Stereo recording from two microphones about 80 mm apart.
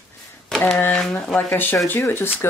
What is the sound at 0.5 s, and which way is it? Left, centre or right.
Speech, centre.